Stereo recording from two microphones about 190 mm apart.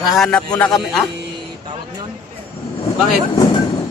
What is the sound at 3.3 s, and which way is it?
Speech, 20° left (ahead or behind).